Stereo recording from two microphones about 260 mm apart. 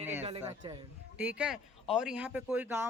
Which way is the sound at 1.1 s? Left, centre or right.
Centre.